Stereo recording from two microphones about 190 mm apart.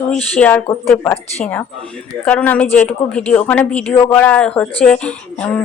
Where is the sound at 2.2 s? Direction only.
10° left (ahead or behind).